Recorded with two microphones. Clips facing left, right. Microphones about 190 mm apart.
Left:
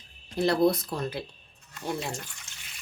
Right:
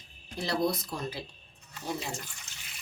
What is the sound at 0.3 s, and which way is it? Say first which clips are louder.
Speech: left 7 dB; 55° left (ahead or behind).